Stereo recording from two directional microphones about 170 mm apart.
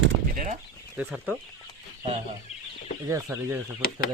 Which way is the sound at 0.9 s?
10° right (ahead or behind).